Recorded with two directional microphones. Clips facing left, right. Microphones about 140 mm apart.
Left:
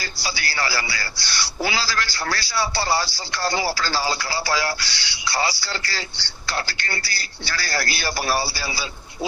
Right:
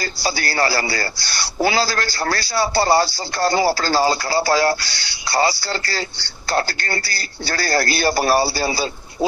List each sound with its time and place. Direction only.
0.0 s a man's voice: 45° right (ahead or behind)